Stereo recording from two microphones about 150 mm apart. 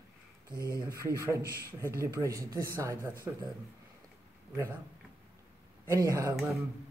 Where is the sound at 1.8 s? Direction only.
20° right (ahead or behind).